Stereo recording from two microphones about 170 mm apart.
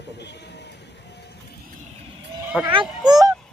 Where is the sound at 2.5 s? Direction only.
5° right (ahead or behind).